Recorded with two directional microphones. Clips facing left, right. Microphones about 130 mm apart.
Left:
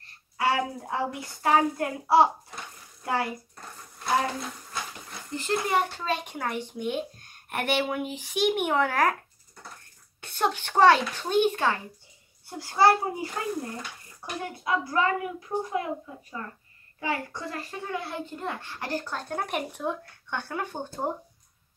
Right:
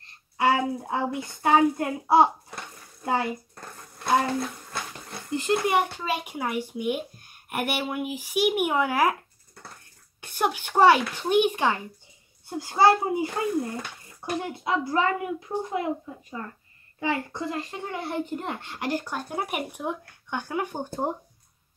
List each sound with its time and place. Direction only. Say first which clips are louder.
0.0 s a woman's voice: right 3 dB; 25° right (ahead or behind)
5.3 s a child's voice: right 3 dB; 15° right (ahead or behind)
10.2 s a child's voice: right 1 dB; 10° right (ahead or behind)